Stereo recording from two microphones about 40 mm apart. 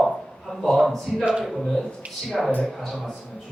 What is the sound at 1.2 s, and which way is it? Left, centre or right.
Speech, centre.